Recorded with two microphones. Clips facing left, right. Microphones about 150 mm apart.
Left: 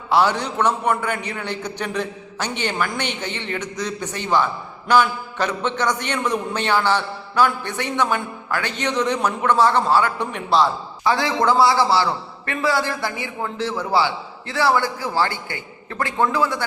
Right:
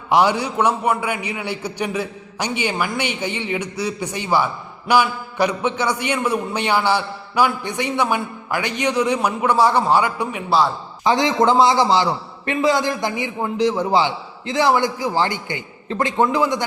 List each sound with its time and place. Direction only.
0.1 s a man's voice: 15° right (ahead or behind)
11.0 s a man's voice: 20° right (ahead or behind)